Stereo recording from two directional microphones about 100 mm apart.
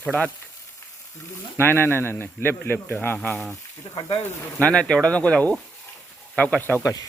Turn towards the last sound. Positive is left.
turn(degrees=35)  # may be behind; listen again after turning